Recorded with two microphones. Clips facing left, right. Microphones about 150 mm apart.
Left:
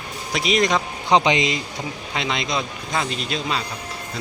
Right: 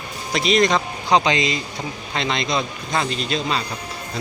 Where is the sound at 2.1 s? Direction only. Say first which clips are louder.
Right 2 dB; 5° left (ahead or behind).